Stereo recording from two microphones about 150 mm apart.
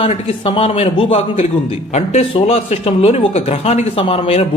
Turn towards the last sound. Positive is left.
turn(degrees=40)  # may be behind; listen again after turning